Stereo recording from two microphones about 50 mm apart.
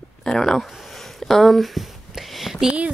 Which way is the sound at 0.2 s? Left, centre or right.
Centre.